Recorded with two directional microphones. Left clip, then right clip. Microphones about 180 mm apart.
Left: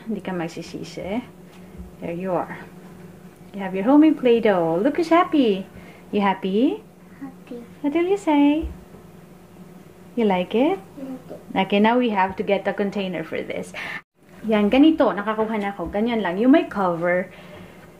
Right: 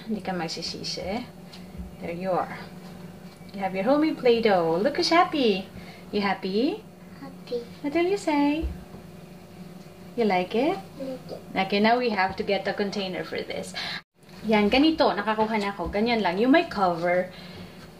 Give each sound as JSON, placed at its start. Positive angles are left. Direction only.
{"t": 0.2, "sound": "a woman's voice", "side_deg": 45}
{"t": 3.5, "sound": "a woman's voice", "side_deg": 45}
{"t": 7.8, "sound": "a woman's voice", "side_deg": 45}
{"t": 10.1, "sound": "a woman's voice", "side_deg": 45}
{"t": 14.5, "sound": "a woman's voice", "side_deg": 35}
{"t": 16.6, "sound": "speech", "side_deg": 40}